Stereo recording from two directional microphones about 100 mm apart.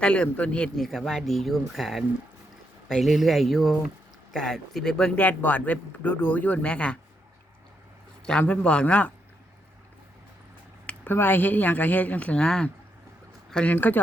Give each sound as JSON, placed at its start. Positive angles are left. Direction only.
{"t": 0.0, "sound": "speech", "side_deg": 10}
{"t": 8.3, "sound": "speech", "side_deg": 10}
{"t": 10.8, "sound": "speech", "side_deg": 20}